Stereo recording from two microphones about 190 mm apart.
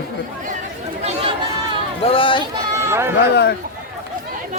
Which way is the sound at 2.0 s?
25° left (ahead or behind).